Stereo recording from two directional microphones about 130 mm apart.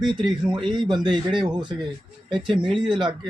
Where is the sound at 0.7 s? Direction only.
35° right (ahead or behind).